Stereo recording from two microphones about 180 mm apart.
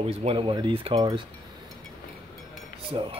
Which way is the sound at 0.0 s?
35° right (ahead or behind).